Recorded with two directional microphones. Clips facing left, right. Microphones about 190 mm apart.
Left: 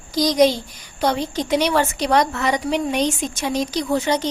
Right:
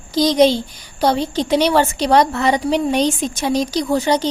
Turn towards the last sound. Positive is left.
turn(degrees=-35)  # may be behind; listen again after turning